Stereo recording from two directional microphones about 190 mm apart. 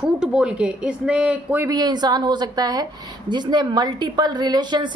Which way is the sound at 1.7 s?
20° right (ahead or behind).